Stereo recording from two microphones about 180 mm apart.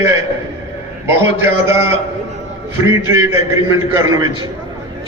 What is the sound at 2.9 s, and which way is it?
A man's voice, 15° right (ahead or behind).